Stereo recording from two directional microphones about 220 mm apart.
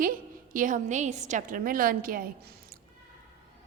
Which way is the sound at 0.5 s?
35° right (ahead or behind).